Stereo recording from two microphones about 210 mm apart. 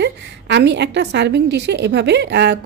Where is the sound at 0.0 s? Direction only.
55° right (ahead or behind).